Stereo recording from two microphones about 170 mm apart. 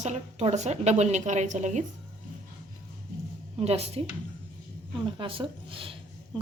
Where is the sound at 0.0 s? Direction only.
40° right (ahead or behind).